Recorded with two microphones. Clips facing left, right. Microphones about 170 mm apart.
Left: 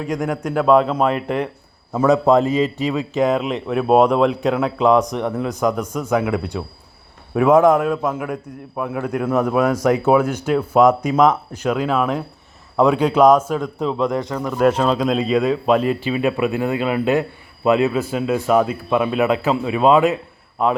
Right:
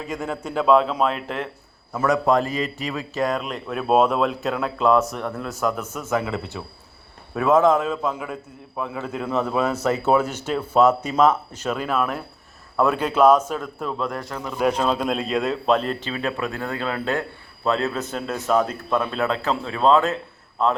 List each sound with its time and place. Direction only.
0.1 s a man's voice: 10° left (ahead or behind)
1.9 s a man's voice: 20° left (ahead or behind)
3.5 s a man's voice: 5° left (ahead or behind)
14.6 s a man's voice: centre (ahead or behind)